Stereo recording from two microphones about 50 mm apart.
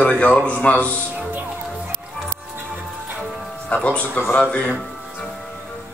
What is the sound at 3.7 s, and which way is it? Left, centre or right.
Speech, left.